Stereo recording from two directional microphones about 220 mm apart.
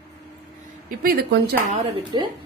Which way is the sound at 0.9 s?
40° right (ahead or behind).